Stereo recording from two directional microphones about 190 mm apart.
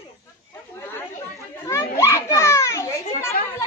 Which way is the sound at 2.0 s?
15° left (ahead or behind).